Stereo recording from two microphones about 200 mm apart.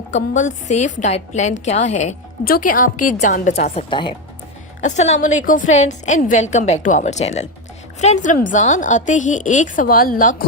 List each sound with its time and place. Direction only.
0.1 s a woman's voice: 35° left (ahead or behind)
4.8 s a woman's voice: 35° left (ahead or behind)